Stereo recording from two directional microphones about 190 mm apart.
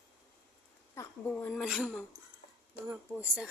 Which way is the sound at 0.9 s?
15° left (ahead or behind).